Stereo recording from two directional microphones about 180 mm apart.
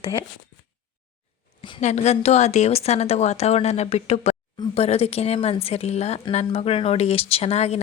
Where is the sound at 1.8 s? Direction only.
40° left (ahead or behind).